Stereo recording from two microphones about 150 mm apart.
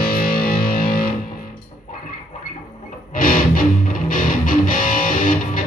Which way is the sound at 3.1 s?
70° left (ahead or behind).